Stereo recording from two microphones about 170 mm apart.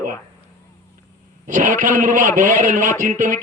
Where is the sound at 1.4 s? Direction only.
50° right (ahead or behind).